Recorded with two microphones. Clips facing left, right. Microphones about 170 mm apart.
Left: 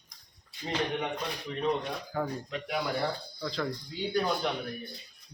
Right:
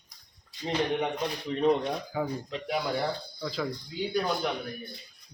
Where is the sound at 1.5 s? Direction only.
30° right (ahead or behind).